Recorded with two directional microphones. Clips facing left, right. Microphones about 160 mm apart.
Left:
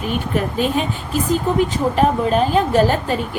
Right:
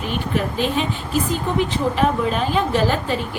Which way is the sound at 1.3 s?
45° left (ahead or behind).